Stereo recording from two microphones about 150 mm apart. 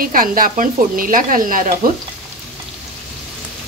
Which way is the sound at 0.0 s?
70° right (ahead or behind).